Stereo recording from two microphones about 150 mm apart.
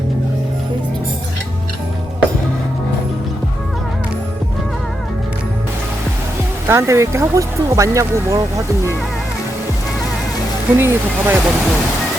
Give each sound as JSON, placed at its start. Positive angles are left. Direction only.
{"t": 6.7, "sound": "speech", "side_deg": -20}
{"t": 10.8, "sound": "speech", "side_deg": -15}